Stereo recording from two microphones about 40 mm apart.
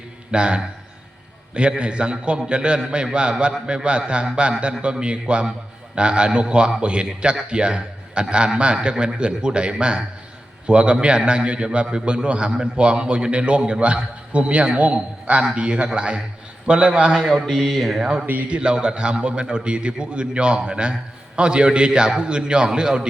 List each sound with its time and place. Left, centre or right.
0.3 s a man's voice: right
1.8 s a man's voice: right
17.5 s a sound: centre
18.0 s a man's voice: centre